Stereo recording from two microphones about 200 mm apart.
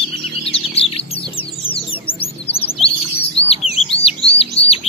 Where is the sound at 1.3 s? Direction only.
25° left (ahead or behind).